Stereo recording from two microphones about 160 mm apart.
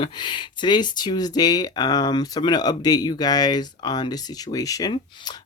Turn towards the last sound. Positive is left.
turn(degrees=25)  # may be behind; listen again after turning